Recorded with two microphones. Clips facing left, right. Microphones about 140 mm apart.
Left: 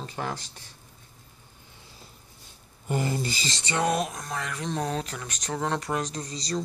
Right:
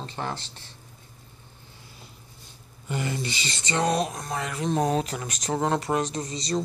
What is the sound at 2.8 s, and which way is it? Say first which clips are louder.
Speech: left 2 dB; 40° left (ahead or behind).